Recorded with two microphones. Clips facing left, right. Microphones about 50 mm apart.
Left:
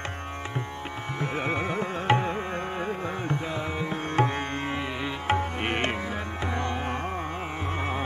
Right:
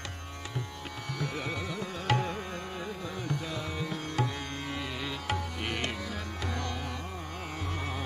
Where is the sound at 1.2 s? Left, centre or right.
Left.